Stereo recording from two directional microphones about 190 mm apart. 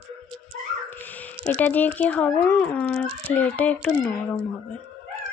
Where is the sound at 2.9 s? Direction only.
35° right (ahead or behind).